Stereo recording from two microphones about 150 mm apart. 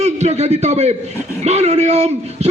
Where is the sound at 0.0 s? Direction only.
50° right (ahead or behind).